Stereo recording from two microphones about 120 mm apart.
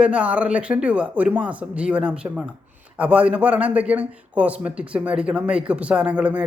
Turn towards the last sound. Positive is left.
turn(degrees=-10)  # may be behind; listen again after turning